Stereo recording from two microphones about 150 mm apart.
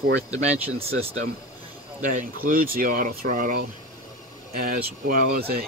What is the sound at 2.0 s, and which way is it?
Speech, 60° right (ahead or behind).